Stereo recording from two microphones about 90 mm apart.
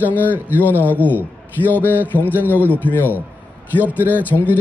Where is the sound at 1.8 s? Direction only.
20° right (ahead or behind).